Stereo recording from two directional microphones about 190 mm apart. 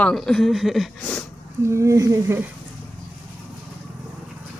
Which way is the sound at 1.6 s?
15° right (ahead or behind).